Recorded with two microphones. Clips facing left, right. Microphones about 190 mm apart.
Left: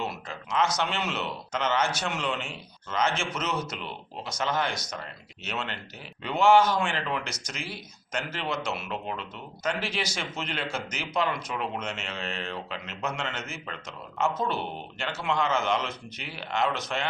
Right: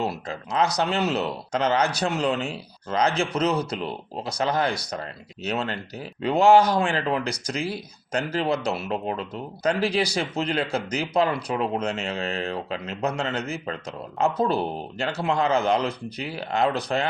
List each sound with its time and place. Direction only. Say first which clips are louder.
0.0 s speech: right 6 dB; 35° right (ahead or behind)